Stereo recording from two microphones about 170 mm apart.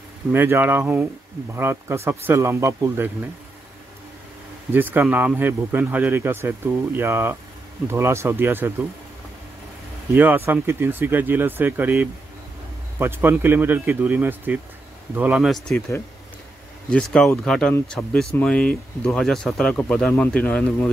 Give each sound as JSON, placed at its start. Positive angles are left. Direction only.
{"t": 0.3, "sound": "speech", "side_deg": -10}
{"t": 4.7, "sound": "speech", "side_deg": -10}
{"t": 10.1, "sound": "speech", "side_deg": -10}
{"t": 16.9, "sound": "speech", "side_deg": 5}